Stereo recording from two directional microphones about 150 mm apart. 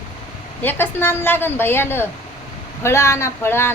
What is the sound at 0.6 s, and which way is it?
A woman's voice, 15° left (ahead or behind).